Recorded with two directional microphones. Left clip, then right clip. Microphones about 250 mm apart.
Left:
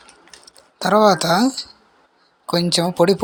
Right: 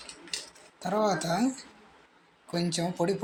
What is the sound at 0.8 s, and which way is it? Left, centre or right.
Speech, left.